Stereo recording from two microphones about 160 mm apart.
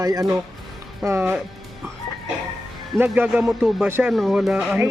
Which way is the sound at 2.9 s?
10° right (ahead or behind).